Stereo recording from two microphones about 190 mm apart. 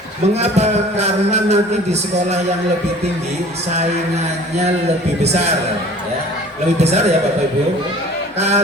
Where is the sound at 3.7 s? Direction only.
35° right (ahead or behind).